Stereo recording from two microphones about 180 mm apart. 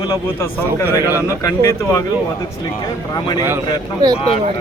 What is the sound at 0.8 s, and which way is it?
Speech, 15° right (ahead or behind).